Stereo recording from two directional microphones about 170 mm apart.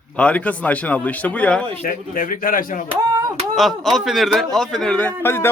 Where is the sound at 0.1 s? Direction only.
5° left (ahead or behind).